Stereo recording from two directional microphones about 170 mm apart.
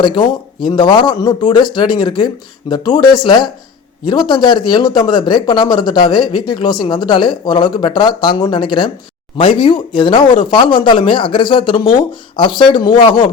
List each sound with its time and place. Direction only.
0.0 s speech: 25° left (ahead or behind)